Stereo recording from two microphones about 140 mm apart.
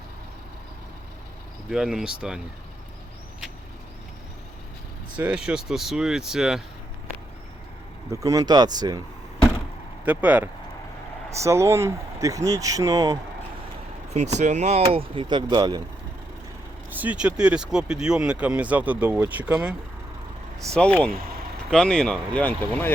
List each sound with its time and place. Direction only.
1.7 s speech: 5° right (ahead or behind)
5.1 s speech: 10° right (ahead or behind)
8.1 s speech: 25° right (ahead or behind)
10.0 s speech: 10° right (ahead or behind)
11.3 s speech: 20° right (ahead or behind)
14.1 s speech: 55° right (ahead or behind)
15.1 s speech: 35° right (ahead or behind)
16.9 s speech: 10° right (ahead or behind)
20.7 s speech: 10° left (ahead or behind)